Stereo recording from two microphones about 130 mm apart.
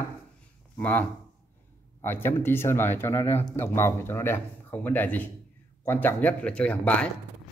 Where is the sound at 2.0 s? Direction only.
15° left (ahead or behind).